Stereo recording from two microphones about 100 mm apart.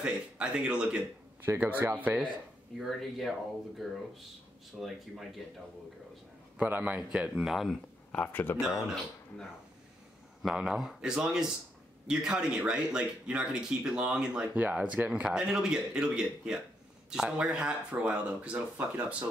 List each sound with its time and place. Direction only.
0.0 s speech: 10° right (ahead or behind)
1.4 s speech: 25° right (ahead or behind)
2.8 s speech: centre (ahead or behind)
6.6 s speech: 15° right (ahead or behind)
8.1 s speech: 15° left (ahead or behind)
8.5 s speech: 5° right (ahead or behind)
10.4 s speech: 5° right (ahead or behind)